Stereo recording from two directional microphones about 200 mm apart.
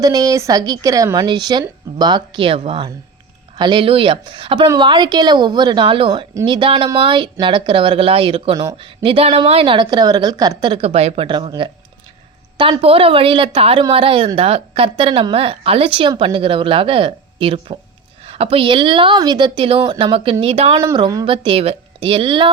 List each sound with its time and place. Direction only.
0.0 s a woman's voice: 20° right (ahead or behind)
20.8 s a woman's voice: 20° right (ahead or behind)